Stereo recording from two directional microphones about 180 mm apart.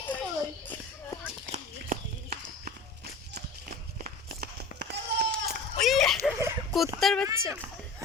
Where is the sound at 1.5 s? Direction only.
50° right (ahead or behind).